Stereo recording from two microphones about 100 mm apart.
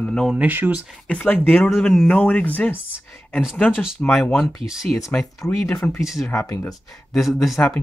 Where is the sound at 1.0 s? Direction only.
15° left (ahead or behind).